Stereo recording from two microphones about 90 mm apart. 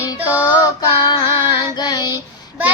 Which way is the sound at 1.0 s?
55° left (ahead or behind).